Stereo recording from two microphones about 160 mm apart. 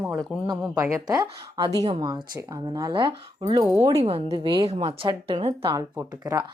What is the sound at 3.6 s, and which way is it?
Speech, 10° right (ahead or behind).